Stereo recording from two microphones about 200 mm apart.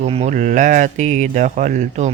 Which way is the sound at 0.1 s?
35° right (ahead or behind).